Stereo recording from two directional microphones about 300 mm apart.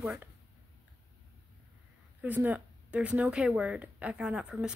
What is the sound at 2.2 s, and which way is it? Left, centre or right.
Speech, centre.